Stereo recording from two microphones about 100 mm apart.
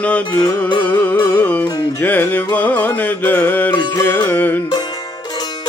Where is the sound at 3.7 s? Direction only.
45° left (ahead or behind).